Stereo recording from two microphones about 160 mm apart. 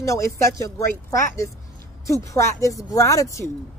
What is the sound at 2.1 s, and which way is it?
A woman's voice, 20° left (ahead or behind).